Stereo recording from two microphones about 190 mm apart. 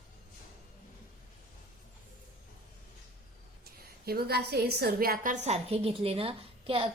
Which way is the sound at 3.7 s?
55° right (ahead or behind).